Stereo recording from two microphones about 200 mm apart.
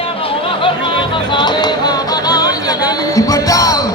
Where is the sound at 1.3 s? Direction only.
20° left (ahead or behind).